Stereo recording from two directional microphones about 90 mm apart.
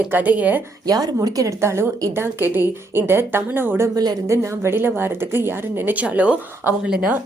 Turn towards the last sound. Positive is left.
turn(degrees=-15)  # may be behind; listen again after turning